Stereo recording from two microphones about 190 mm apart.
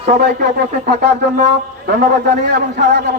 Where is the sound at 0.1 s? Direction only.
60° right (ahead or behind).